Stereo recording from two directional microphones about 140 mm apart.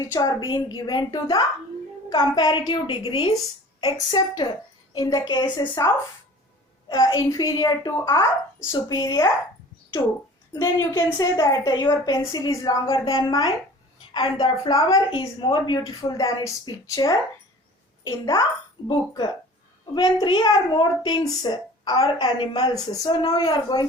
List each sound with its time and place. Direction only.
0.0 s a woman's voice: 25° left (ahead or behind)
10.5 s a woman's voice: 25° left (ahead or behind)